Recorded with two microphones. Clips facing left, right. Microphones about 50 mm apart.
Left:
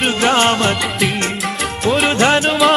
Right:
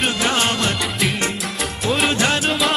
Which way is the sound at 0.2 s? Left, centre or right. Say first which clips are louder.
Left 6 dB; left.